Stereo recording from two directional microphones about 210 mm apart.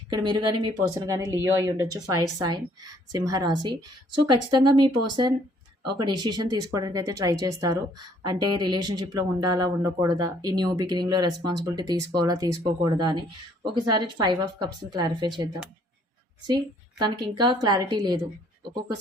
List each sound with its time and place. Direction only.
0.1 s speech: 20° right (ahead or behind)
17.0 s speech: 20° right (ahead or behind)